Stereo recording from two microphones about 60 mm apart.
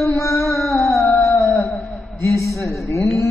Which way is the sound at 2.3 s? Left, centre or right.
Left.